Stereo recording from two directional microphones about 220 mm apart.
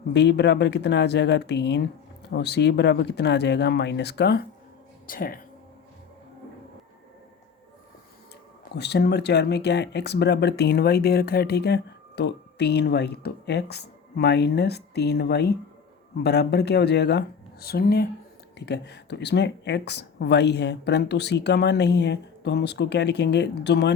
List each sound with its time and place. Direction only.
0.1 s speech: 50° left (ahead or behind)
8.7 s speech: 50° left (ahead or behind)